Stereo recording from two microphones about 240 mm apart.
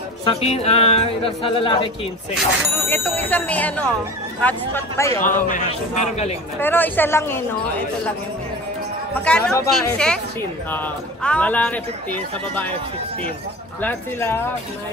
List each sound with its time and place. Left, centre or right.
0.2 s speech: left
2.7 s speech: centre
5.2 s a man's voice: left
6.6 s speech: centre
9.2 s a woman's voice: centre
13.7 s speech: centre